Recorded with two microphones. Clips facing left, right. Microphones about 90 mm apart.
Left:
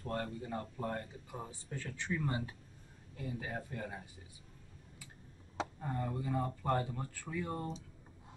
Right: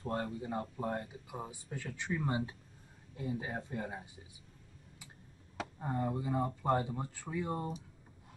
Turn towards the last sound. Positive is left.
turn(degrees=-20)  # may be behind; listen again after turning